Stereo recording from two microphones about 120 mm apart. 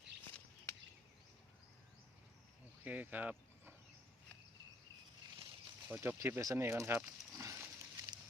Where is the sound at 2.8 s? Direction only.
15° right (ahead or behind).